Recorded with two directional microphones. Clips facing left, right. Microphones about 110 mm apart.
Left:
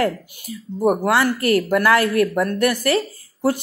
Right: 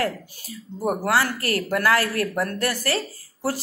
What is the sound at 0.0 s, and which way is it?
A woman's voice, 20° left (ahead or behind).